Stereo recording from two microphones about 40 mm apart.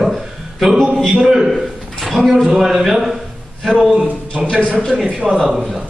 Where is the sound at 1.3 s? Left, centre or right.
Centre.